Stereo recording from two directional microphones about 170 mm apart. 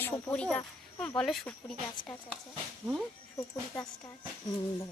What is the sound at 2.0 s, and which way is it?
Speech, 25° left (ahead or behind).